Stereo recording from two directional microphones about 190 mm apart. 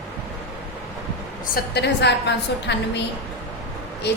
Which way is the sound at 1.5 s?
60° left (ahead or behind).